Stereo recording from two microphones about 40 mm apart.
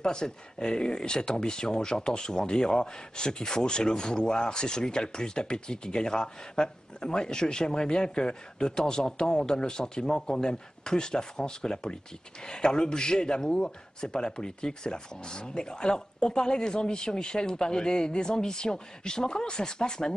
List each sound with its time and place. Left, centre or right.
0.0 s speech: centre